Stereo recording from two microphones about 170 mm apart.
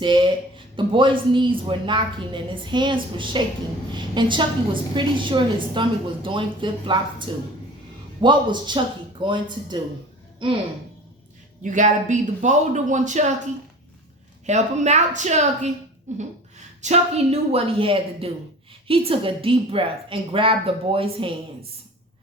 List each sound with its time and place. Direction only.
0.0 s speech: 30° right (ahead or behind)
11.6 s speech: 45° right (ahead or behind)
14.4 s a woman's voice: 40° right (ahead or behind)